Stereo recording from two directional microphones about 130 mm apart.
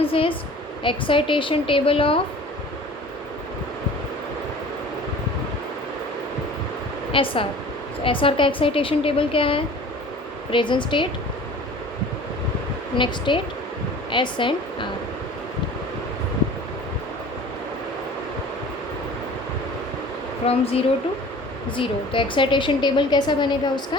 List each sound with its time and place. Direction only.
0.0 s a woman's voice: 45° left (ahead or behind)
7.1 s a woman's voice: 45° left (ahead or behind)
13.0 s a woman's voice: 40° left (ahead or behind)
20.5 s a woman's voice: 50° left (ahead or behind)